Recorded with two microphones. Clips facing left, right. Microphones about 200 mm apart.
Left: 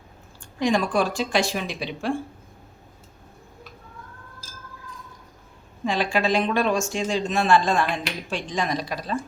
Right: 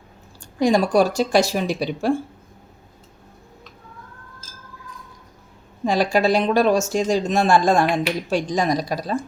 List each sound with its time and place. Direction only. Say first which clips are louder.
0.6 s speech: right 5 dB; 40° right (ahead or behind)
5.8 s speech: right 5 dB; 40° right (ahead or behind)